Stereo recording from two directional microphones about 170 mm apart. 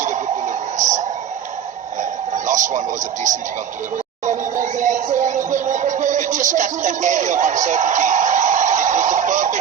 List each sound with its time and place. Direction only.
0.0 s a sound: 45° right (ahead or behind)
2.0 s radio: 45° right (ahead or behind)
4.3 s speech: 50° right (ahead or behind)